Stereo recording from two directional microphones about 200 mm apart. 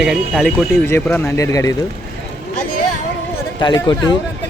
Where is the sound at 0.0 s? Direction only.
Centre (ahead or behind).